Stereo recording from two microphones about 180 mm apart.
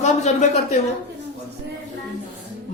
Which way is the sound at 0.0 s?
40° left (ahead or behind).